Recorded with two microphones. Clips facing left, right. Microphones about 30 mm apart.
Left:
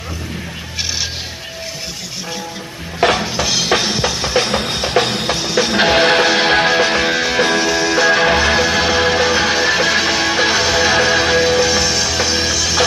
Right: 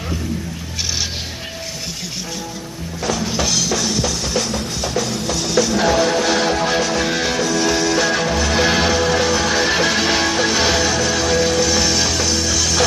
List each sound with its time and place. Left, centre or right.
3.0 s stir: left
3.3 s music: centre
3.6 s music: left
4.5 s music: left
6.2 s music: left
7.1 s music: centre
7.3 s music: left
7.6 s music: centre
8.2 s music: left
8.5 s music: centre
8.9 s music: left
9.6 s music: centre
10.8 s music: left
11.8 s music: centre